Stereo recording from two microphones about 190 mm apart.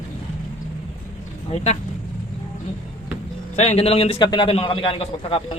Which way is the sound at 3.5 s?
35° left (ahead or behind).